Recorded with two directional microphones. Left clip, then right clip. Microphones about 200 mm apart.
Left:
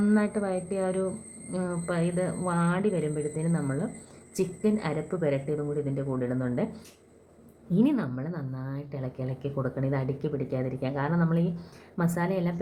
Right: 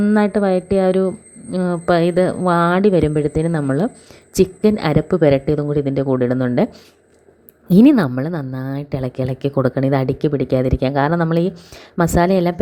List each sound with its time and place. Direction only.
0.0 s a woman's voice: 35° right (ahead or behind)
7.7 s a woman's voice: 45° right (ahead or behind)